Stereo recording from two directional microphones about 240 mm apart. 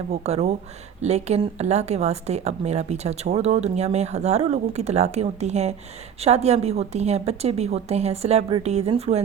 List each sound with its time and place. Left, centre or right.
0.1 s speech: right